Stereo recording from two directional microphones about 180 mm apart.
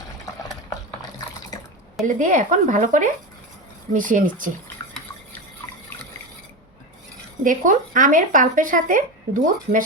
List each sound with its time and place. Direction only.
2.0 s speech: 45° right (ahead or behind)
7.4 s speech: 45° right (ahead or behind)